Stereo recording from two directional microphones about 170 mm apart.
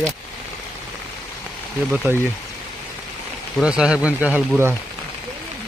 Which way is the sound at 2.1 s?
15° right (ahead or behind).